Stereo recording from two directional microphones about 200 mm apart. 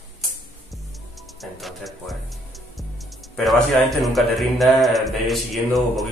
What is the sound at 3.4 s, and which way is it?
A man's voice, centre (ahead or behind).